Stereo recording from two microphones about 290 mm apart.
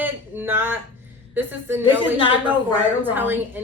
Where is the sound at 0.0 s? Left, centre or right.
Centre.